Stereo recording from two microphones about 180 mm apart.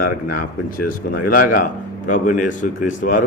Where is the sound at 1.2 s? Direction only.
50° left (ahead or behind).